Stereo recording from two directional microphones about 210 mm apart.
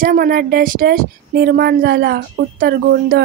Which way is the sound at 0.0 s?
45° right (ahead or behind).